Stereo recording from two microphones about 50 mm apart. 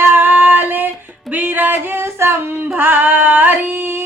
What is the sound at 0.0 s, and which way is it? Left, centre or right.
Female singing, right.